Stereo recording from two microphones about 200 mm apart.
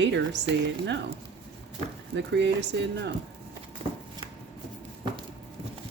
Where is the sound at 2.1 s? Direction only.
60° right (ahead or behind).